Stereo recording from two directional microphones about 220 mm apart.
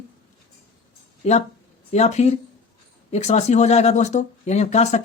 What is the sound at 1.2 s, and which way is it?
Speech, 30° left (ahead or behind).